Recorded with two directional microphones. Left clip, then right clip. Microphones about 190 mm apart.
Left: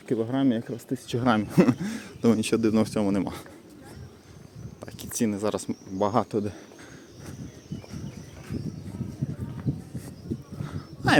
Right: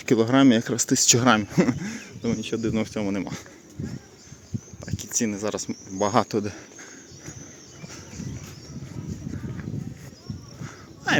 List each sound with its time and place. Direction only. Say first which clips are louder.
0.0 s speech: right 7 dB; 25° right (ahead or behind)
1.2 s speech: right 5 dB; centre (ahead or behind)
1.5 s speech: left 1 dB; 10° left (ahead or behind)
2.2 s speech: left 4 dB; 30° left (ahead or behind)
4.8 s a sound: right 2 dB; 15° left (ahead or behind)
5.1 s speech: even; 10° left (ahead or behind)